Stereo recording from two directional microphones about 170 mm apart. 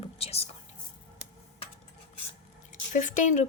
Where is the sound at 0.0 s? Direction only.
35° left (ahead or behind).